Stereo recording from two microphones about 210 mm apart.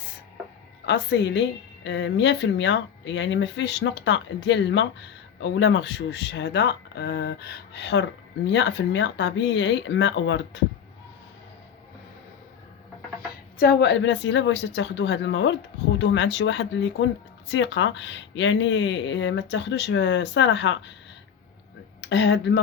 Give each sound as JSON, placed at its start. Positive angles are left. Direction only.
{"t": 0.9, "sound": "a woman's voice", "side_deg": 55}
{"t": 13.6, "sound": "a woman's voice", "side_deg": 50}
{"t": 22.0, "sound": "speech", "side_deg": 55}